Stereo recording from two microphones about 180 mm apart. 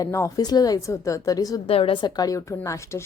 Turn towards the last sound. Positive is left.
turn(degrees=15)  # may be behind; listen again after turning